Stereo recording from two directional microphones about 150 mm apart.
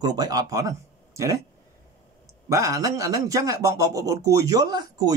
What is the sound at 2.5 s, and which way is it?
Speech, 25° right (ahead or behind).